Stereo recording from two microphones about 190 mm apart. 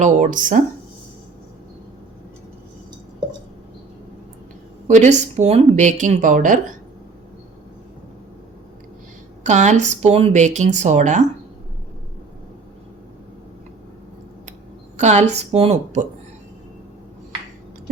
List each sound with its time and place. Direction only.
0.0 s speech: 40° right (ahead or behind)
4.9 s speech: 40° right (ahead or behind)
9.4 s speech: 40° right (ahead or behind)
14.9 s speech: 35° right (ahead or behind)